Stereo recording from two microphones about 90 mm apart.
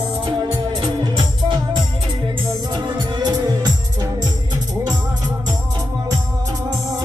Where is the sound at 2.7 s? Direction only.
50° right (ahead or behind).